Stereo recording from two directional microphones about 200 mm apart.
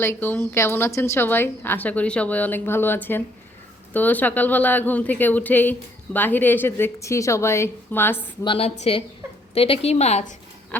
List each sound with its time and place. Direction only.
0.0 s a woman's voice: 10° left (ahead or behind)
8.4 s a woman's voice: 30° left (ahead or behind)